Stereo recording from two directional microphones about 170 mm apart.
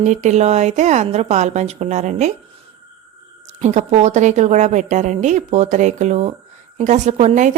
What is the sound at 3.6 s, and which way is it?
A woman's voice, 45° right (ahead or behind).